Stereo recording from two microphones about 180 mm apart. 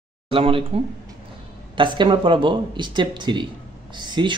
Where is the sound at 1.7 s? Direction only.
25° right (ahead or behind).